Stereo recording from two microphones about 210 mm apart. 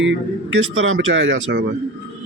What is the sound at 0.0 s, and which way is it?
Speech, 65° right (ahead or behind).